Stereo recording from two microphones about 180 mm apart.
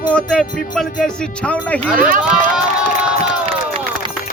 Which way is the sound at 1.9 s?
50° right (ahead or behind).